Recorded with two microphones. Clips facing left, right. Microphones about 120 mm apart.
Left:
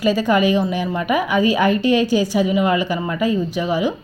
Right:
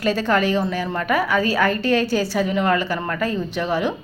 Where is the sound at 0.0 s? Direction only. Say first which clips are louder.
Left 3 dB; 10° left (ahead or behind).